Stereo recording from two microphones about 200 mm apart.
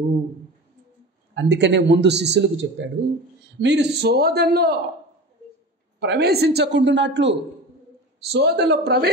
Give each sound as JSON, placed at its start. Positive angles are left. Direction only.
{"t": 1.3, "sound": "a man's voice", "side_deg": -65}
{"t": 5.9, "sound": "a man's voice", "side_deg": -55}